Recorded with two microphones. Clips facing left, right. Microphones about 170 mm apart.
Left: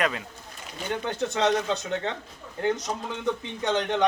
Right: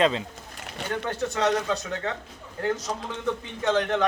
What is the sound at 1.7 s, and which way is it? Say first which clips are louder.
Speech: even; 25° left (ahead or behind).